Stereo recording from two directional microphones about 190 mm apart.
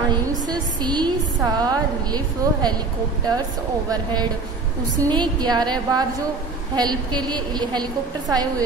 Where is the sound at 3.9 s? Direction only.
20° right (ahead or behind).